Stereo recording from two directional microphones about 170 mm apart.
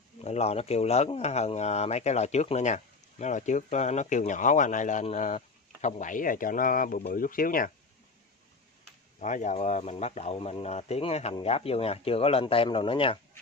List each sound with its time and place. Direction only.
0.2 s speech: 40° left (ahead or behind); by 7.7 s 55° left (ahead or behind)
9.2 s speech: 45° left (ahead or behind)